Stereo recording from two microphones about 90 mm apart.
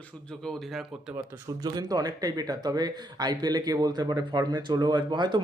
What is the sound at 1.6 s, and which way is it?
Speech, 45° right (ahead or behind).